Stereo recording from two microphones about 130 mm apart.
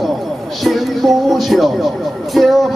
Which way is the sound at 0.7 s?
Centre (ahead or behind).